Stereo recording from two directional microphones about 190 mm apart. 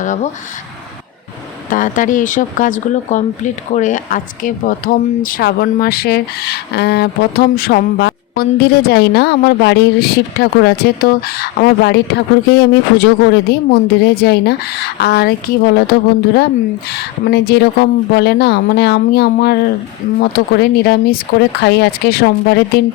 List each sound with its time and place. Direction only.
0.0 s speech: 40° left (ahead or behind)
1.7 s speech: 45° left (ahead or behind)